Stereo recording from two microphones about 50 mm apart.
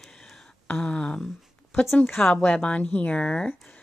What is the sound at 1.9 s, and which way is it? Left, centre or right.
Speech, left.